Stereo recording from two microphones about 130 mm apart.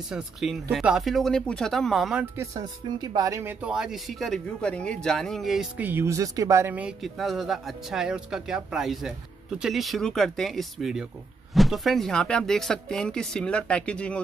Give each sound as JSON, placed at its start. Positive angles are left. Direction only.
{"t": 0.1, "sound": "speech", "side_deg": 0}
{"t": 2.3, "sound": "speech", "side_deg": -30}
{"t": 3.6, "sound": "speech", "side_deg": -5}
{"t": 5.8, "sound": "speech", "side_deg": -15}
{"t": 7.0, "sound": "speech", "side_deg": 0}